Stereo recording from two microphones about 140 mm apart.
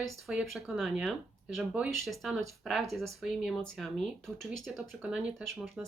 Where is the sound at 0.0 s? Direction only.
Centre (ahead or behind).